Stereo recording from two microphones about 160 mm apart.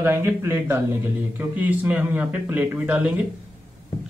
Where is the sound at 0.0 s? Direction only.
15° right (ahead or behind).